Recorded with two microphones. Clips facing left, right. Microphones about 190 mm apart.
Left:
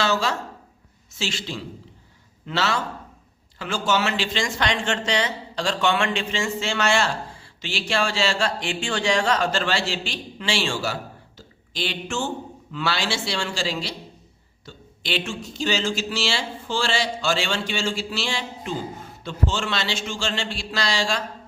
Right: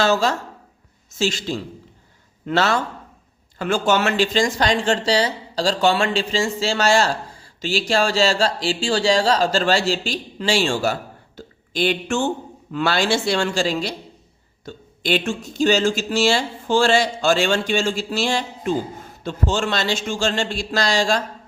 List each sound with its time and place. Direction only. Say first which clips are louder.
0.0 s speech: right 5 dB; 45° right (ahead or behind)